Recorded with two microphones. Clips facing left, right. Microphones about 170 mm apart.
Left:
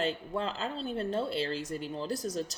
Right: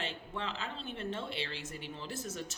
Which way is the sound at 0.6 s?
40° left (ahead or behind).